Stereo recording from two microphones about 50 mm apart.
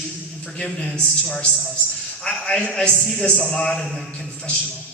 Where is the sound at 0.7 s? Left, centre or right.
Centre.